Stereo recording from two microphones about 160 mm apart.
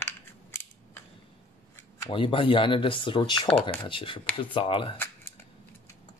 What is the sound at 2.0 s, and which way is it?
Speech, 30° left (ahead or behind).